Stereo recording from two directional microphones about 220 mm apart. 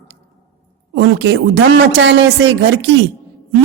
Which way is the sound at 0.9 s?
60° right (ahead or behind).